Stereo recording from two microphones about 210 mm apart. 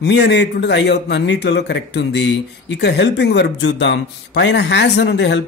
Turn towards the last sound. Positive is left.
turn(degrees=55)  # may be behind; listen again after turning